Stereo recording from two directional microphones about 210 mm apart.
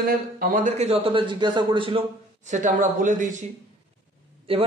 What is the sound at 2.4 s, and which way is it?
Speech, 35° right (ahead or behind).